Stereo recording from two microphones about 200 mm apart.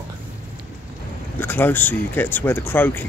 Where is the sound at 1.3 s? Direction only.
10° left (ahead or behind).